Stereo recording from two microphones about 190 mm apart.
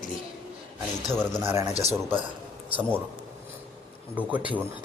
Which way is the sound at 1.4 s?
15° right (ahead or behind).